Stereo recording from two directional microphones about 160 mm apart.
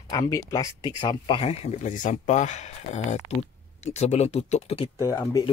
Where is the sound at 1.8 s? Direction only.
50° left (ahead or behind).